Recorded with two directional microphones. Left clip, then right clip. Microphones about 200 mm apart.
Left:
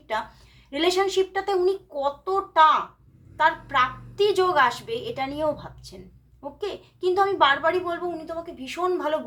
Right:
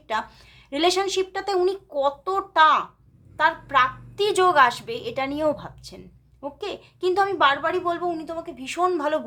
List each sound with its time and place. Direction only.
0.7 s a woman's voice: 30° right (ahead or behind)